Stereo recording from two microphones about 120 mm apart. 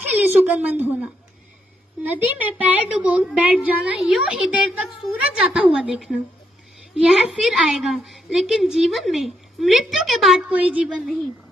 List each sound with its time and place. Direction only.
0.0 s a sound: 15° right (ahead or behind)
2.0 s a woman's voice: 15° right (ahead or behind)
7.4 s a woman's voice: centre (ahead or behind)
10.5 s a woman's voice: 10° right (ahead or behind)